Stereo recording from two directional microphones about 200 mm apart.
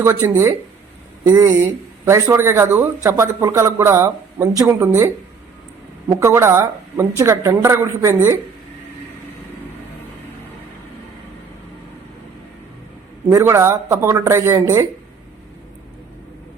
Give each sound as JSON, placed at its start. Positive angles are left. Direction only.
{"t": 0.0, "sound": "a man's voice", "side_deg": -15}
{"t": 13.3, "sound": "a man's voice", "side_deg": -15}